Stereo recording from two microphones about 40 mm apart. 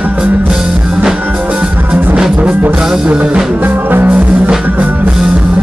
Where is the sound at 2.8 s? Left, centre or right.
Centre.